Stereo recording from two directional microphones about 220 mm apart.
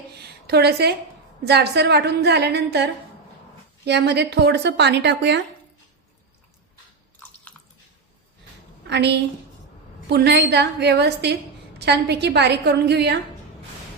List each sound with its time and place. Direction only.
0.2 s a sound: 45° right (ahead or behind)
1.5 s a woman's voice: 50° right (ahead or behind)
8.9 s a woman's voice: 50° right (ahead or behind)